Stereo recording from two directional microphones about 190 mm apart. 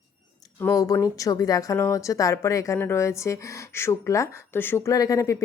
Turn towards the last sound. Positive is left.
turn(degrees=15)  # may be behind; listen again after turning